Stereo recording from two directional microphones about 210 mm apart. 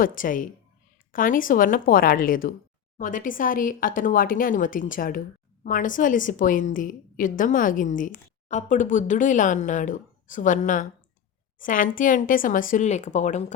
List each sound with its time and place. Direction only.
0.0 s a woman's voice: 40° left (ahead or behind)